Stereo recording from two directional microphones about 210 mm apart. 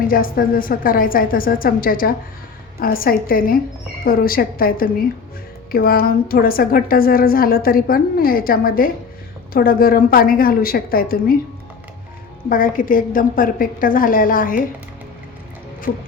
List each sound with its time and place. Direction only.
0.1 s a woman's voice: 45° left (ahead or behind)
12.5 s a woman's voice: 40° left (ahead or behind)
15.9 s a woman's voice: 40° left (ahead or behind)